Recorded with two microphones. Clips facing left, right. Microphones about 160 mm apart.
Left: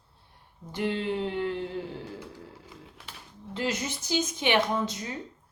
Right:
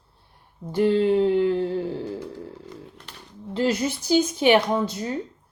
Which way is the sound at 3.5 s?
35° right (ahead or behind).